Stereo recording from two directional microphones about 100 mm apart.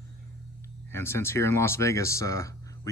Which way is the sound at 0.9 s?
25° left (ahead or behind).